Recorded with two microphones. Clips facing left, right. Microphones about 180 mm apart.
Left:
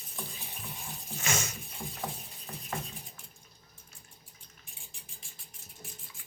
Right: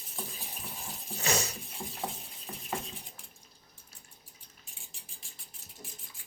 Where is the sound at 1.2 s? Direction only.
35° right (ahead or behind).